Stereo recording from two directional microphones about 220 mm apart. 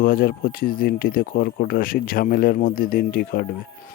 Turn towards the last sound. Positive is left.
turn(degrees=45)  # may be behind; listen again after turning